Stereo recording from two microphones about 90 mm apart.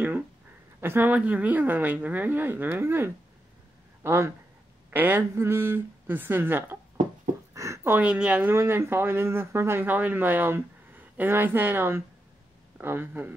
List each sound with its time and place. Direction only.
0.7 s speech: 25° right (ahead or behind)
7.5 s a sound: 35° right (ahead or behind)
7.9 s speech: 10° right (ahead or behind)